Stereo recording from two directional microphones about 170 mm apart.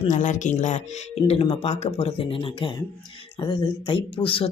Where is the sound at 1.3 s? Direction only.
35° left (ahead or behind).